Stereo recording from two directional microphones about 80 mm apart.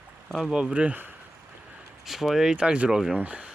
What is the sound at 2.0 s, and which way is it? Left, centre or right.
Speech, centre.